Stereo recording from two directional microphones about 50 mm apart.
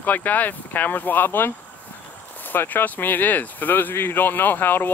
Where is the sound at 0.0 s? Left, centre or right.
Left.